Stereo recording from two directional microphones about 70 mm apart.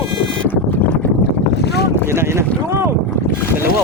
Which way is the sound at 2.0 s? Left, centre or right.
Right.